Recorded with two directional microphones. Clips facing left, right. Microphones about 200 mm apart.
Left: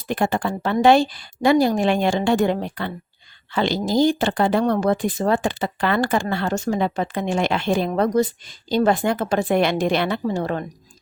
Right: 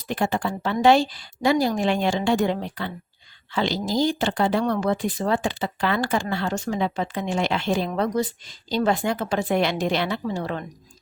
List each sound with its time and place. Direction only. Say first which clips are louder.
0.1 s speech: left 3 dB; 55° left (ahead or behind)